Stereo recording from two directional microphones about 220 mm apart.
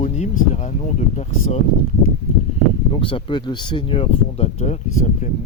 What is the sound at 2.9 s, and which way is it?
Speech, 25° left (ahead or behind).